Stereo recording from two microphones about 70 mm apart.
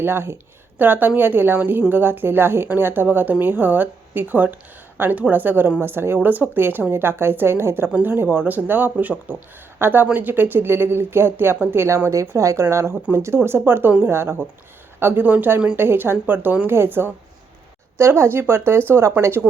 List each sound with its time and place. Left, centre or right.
0.0 s speech: right